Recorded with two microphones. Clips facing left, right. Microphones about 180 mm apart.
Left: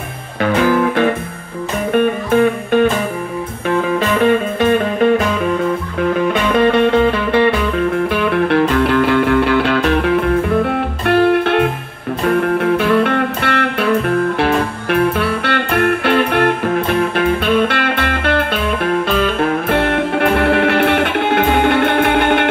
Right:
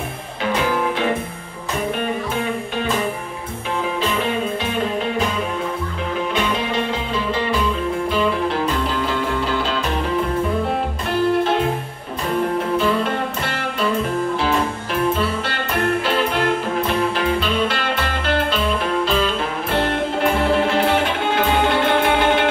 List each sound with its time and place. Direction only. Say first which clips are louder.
0.4 s music: left 7 dB; 55° left (ahead or behind)
4.2 s music: left 8 dB; 55° left (ahead or behind)
6.5 s music: left 11 dB; 60° left (ahead or behind)